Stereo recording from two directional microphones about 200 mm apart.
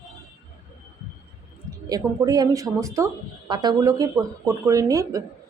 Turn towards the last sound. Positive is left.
turn(degrees=-15)  # may be behind; listen again after turning